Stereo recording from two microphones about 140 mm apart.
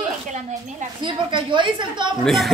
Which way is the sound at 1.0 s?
35° right (ahead or behind).